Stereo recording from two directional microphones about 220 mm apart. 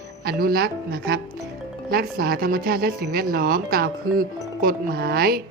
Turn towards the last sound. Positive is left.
turn(degrees=-45)  # may be behind; listen again after turning